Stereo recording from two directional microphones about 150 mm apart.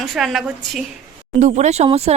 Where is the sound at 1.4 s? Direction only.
50° right (ahead or behind).